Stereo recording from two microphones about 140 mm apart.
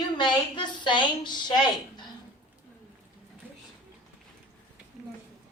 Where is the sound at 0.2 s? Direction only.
35° left (ahead or behind).